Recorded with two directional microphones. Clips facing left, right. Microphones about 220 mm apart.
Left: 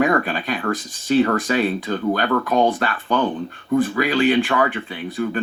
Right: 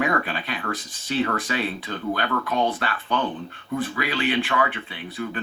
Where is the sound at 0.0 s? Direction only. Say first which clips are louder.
Left 6 dB; 45° left (ahead or behind).